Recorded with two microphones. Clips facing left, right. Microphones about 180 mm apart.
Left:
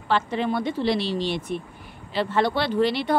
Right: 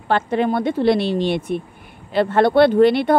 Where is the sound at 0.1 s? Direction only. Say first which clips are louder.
Right 5 dB; 50° right (ahead or behind).